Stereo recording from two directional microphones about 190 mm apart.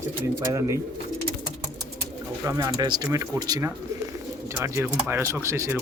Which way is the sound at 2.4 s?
20° right (ahead or behind).